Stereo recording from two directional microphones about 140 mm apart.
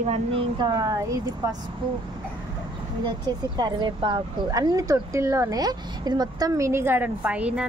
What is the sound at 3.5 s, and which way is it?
Speech, 30° right (ahead or behind).